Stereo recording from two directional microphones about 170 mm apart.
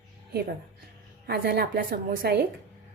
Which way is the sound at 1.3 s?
65° right (ahead or behind).